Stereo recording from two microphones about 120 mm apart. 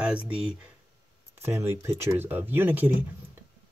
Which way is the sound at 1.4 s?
20° right (ahead or behind).